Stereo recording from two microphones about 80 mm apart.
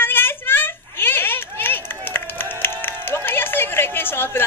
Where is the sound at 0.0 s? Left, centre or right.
Left.